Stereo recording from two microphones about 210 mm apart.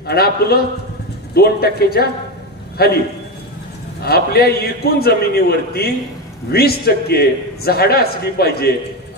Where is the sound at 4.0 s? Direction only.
50° left (ahead or behind).